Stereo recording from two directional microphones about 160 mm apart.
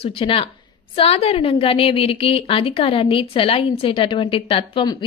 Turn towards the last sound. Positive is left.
turn(degrees=30)  # may be behind; listen again after turning